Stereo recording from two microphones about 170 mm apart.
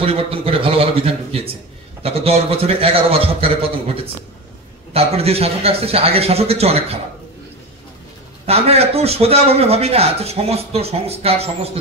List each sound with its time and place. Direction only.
0.0 s speech: 35° right (ahead or behind)
8.5 s speech: 35° right (ahead or behind)